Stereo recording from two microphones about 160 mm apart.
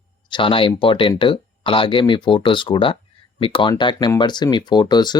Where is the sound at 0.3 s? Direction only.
30° left (ahead or behind).